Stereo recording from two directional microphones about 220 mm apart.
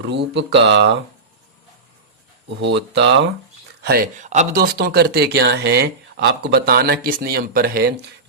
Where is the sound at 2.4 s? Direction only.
50° right (ahead or behind).